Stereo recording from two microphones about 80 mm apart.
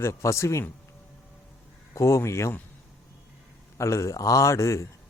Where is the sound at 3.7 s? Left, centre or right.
Left.